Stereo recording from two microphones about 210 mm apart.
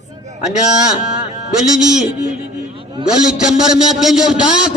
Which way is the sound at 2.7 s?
25° right (ahead or behind).